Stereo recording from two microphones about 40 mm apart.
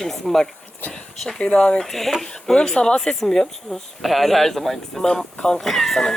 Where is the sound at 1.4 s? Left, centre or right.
Left.